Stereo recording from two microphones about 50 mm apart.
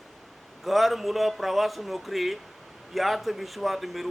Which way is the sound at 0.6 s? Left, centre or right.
Centre.